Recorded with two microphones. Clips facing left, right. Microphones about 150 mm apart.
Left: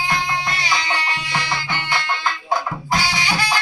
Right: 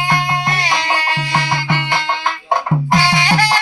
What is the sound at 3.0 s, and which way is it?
Music, 90° right.